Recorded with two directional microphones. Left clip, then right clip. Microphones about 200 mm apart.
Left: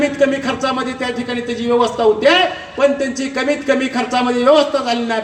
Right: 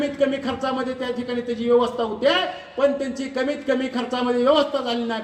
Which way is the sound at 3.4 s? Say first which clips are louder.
Left 7 dB; 50° right (ahead or behind).